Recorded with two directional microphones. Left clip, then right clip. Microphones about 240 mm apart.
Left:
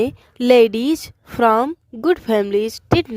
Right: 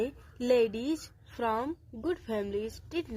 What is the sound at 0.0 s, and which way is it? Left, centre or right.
A woman's voice, left.